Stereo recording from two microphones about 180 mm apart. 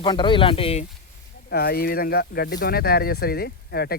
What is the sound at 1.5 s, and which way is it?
Speech, 60° left (ahead or behind).